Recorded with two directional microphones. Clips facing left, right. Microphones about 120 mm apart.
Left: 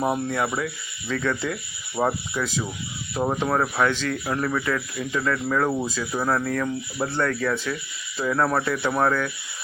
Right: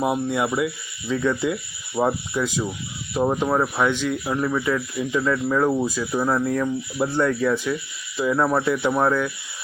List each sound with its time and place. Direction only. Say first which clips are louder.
0.0 s speech: right 2 dB; 5° right (ahead or behind)
6.4 s speech: right 3 dB; 20° right (ahead or behind)